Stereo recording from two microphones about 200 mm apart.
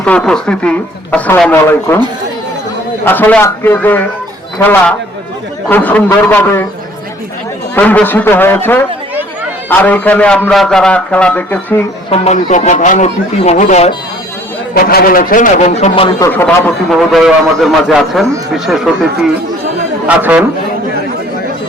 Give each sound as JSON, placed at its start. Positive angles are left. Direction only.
{"t": 0.0, "sound": "speech", "side_deg": 5}
{"t": 3.0, "sound": "a man's voice", "side_deg": 10}
{"t": 7.8, "sound": "a man's voice", "side_deg": 10}
{"t": 12.1, "sound": "a man's voice", "side_deg": 35}
{"t": 14.8, "sound": "a man's voice", "side_deg": 50}
{"t": 16.0, "sound": "speech", "side_deg": 15}
{"t": 20.1, "sound": "a man's voice", "side_deg": -10}